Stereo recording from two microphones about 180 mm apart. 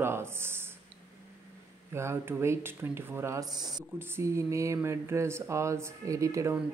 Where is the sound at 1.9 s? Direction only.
15° right (ahead or behind).